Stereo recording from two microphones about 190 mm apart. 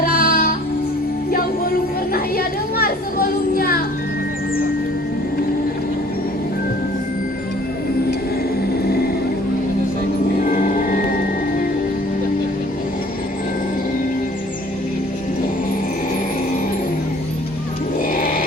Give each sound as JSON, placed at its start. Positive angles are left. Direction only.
{"t": 0.0, "sound": "music", "side_deg": 55}
{"t": 2.1, "sound": "music", "side_deg": 50}
{"t": 10.4, "sound": "music", "side_deg": 45}
{"t": 18.1, "sound": "music", "side_deg": 45}